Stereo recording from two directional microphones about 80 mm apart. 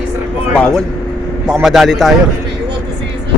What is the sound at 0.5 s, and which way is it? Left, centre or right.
Speech, centre.